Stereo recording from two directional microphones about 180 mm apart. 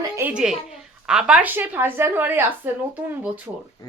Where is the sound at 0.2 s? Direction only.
5° right (ahead or behind).